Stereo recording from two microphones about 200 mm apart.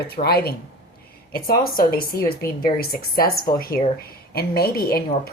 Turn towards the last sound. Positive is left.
turn(degrees=50)  # may be behind; listen again after turning